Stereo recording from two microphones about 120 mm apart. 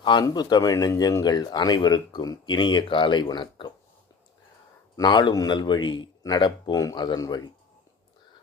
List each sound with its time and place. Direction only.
0.0 s speech: 40° left (ahead or behind)
4.9 s speech: 35° left (ahead or behind)